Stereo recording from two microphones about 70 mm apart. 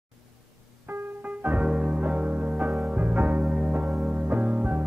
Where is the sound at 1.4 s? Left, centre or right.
Right.